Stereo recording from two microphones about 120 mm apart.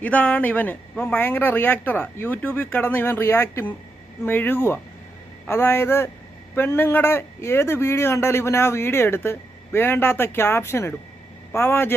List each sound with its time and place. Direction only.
0.0 s a man's voice: 10° left (ahead or behind)